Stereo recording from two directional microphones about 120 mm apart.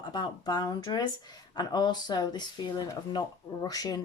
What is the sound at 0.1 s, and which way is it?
Speech, 35° left (ahead or behind).